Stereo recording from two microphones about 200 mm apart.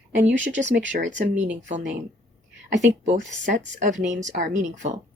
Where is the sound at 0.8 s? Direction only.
65° right (ahead or behind).